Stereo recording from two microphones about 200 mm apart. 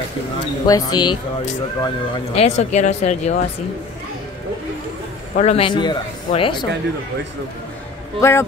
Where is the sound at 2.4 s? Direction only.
35° left (ahead or behind).